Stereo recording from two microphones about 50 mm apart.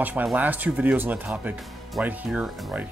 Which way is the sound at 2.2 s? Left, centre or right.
Centre.